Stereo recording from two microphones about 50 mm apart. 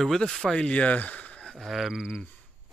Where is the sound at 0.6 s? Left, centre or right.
Left.